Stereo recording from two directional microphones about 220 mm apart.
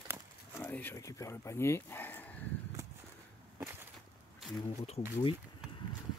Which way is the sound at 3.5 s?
10° right (ahead or behind).